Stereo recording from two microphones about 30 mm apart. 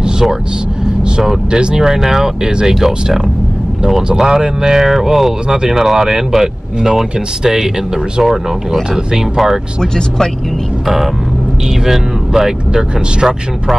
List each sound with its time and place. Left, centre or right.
0.0 s vehicle: centre
1.5 s speech: right
1.8 s speech: centre
4.1 s speech: right
4.8 s speech: centre
9.9 s speech: centre
11.8 s speech: centre